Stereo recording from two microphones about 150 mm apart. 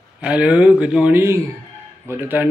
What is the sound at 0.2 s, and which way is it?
A man's voice, 10° right (ahead or behind).